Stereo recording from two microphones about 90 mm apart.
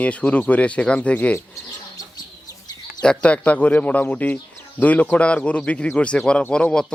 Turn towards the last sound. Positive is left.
turn(degrees=10)  # may be behind; listen again after turning